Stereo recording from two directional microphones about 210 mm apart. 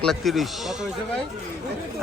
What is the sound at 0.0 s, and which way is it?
Speech, centre (ahead or behind).